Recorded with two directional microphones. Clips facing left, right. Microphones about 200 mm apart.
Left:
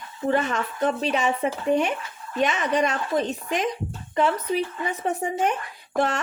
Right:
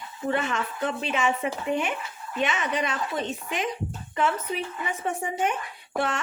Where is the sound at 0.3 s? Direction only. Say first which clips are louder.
Left 4 dB; 40° left (ahead or behind).